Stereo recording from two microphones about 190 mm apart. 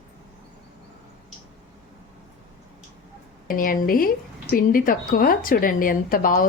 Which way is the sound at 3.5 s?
45° left (ahead or behind).